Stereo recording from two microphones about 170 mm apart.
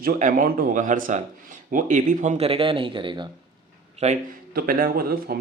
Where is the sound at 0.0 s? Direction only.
55° right (ahead or behind); by 3.2 s 30° right (ahead or behind).